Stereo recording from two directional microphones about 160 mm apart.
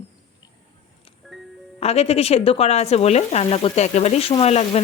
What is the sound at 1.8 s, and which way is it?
Speech, 40° left (ahead or behind).